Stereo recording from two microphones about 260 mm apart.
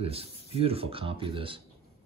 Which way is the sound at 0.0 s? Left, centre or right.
Right.